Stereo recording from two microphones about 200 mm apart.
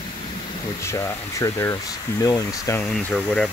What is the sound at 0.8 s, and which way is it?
Speech, 15° left (ahead or behind).